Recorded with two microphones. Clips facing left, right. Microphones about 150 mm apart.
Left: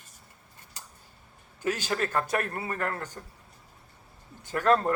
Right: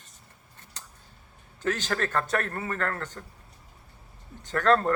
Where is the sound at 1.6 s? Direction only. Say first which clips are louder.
Right 1 dB; 10° left (ahead or behind).